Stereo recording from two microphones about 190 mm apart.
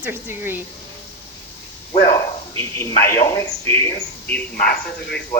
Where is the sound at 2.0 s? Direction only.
20° left (ahead or behind).